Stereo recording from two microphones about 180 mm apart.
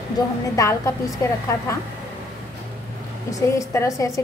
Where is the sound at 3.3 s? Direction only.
15° left (ahead or behind).